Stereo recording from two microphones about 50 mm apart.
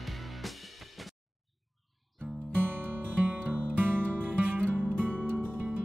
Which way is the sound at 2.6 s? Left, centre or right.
Right.